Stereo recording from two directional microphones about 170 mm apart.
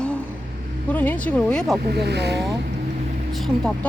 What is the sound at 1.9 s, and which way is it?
Speech, 75° right (ahead or behind).